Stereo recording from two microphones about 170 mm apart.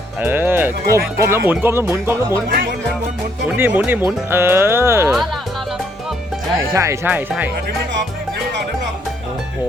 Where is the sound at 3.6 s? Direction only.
10° right (ahead or behind).